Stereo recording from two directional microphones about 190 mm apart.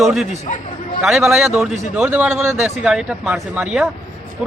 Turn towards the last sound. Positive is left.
turn(degrees=-5)  # may be behind; listen again after turning